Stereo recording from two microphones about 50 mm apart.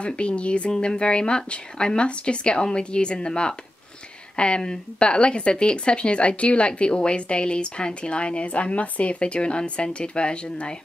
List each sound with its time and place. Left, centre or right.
0.0 s speech: left